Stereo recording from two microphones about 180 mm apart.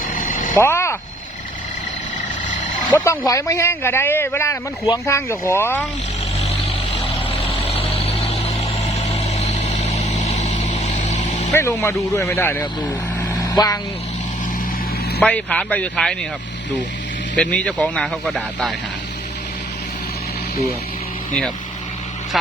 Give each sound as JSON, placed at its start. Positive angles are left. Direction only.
{"t": 0.2, "sound": "vehicle", "side_deg": 45}
{"t": 0.5, "sound": "speech", "side_deg": 15}
{"t": 2.9, "sound": "a man's voice", "side_deg": 15}
{"t": 6.7, "sound": "vehicle", "side_deg": 35}
{"t": 11.5, "sound": "speech", "side_deg": 15}
{"t": 15.2, "sound": "speech", "side_deg": 5}
{"t": 17.3, "sound": "a man's voice", "side_deg": 5}